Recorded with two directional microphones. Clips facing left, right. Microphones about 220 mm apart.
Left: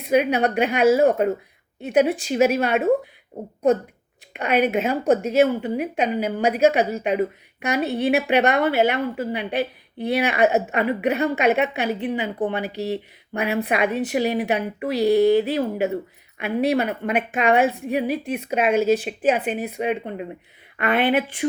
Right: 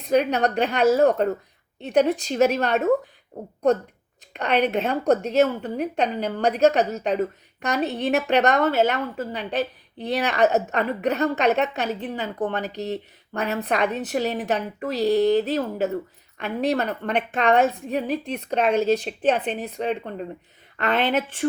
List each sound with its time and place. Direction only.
0.0 s a woman's voice: 10° left (ahead or behind)
4.4 s a woman's voice: 10° left (ahead or behind)